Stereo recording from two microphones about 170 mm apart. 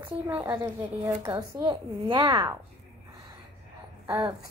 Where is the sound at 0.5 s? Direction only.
25° right (ahead or behind).